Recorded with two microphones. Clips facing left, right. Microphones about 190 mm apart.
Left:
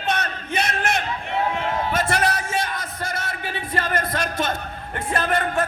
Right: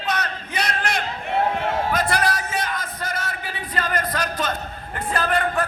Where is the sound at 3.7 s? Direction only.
25° left (ahead or behind).